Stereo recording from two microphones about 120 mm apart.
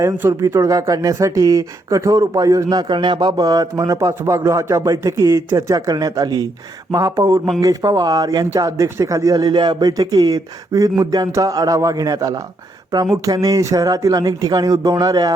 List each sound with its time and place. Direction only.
0.0 s speech: 20° right (ahead or behind)